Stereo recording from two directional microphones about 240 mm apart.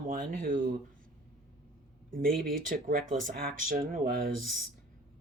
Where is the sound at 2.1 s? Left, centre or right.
Right.